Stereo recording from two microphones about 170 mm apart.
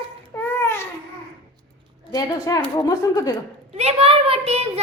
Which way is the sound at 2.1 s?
20° left (ahead or behind).